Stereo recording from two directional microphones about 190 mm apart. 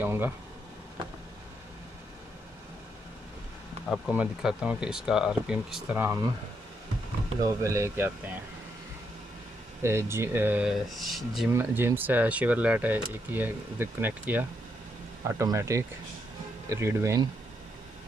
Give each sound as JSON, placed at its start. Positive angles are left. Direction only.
{"t": 0.0, "sound": "speech", "side_deg": -10}
{"t": 3.9, "sound": "speech", "side_deg": -5}
{"t": 7.4, "sound": "speech", "side_deg": -15}
{"t": 9.8, "sound": "speech", "side_deg": -15}
{"t": 11.5, "sound": "speech", "side_deg": -10}